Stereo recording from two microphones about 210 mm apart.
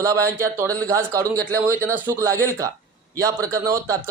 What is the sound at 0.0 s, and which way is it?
Speech, 15° right (ahead or behind).